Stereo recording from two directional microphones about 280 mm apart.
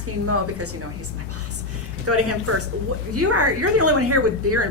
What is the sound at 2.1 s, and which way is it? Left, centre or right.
A woman's voice, right.